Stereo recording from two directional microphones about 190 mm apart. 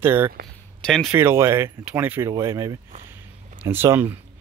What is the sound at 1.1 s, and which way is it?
Speech, 15° right (ahead or behind).